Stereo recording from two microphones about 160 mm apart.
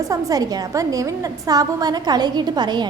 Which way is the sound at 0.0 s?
20° right (ahead or behind).